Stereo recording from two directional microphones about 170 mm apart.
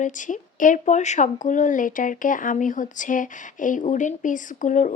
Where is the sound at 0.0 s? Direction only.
50° left (ahead or behind).